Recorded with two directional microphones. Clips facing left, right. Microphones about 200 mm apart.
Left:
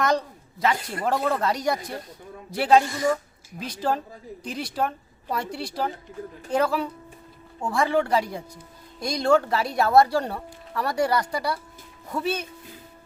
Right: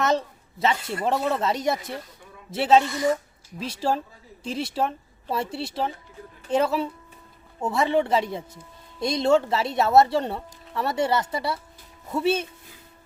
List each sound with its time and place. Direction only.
0.0 s a man's voice: 25° right (ahead or behind)